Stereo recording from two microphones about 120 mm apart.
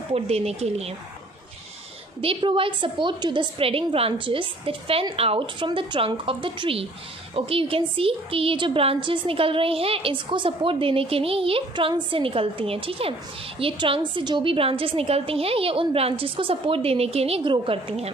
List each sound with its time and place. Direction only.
0.1 s speech: 60° right (ahead or behind)
2.2 s a woman's voice: 45° right (ahead or behind)
5.7 s a woman's voice: 45° right (ahead or behind)